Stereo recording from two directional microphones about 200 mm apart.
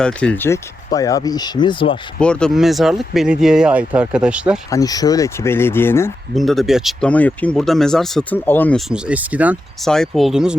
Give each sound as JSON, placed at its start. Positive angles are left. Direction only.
{"t": 0.0, "sound": "speech", "side_deg": 5}
{"t": 2.1, "sound": "speech", "side_deg": 5}
{"t": 4.7, "sound": "speech", "side_deg": 20}
{"t": 6.3, "sound": "speech", "side_deg": 0}
{"t": 8.9, "sound": "speech", "side_deg": -5}